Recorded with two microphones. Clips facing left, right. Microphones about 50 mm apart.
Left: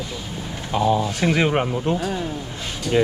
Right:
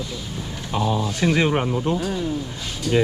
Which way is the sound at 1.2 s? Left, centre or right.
Left.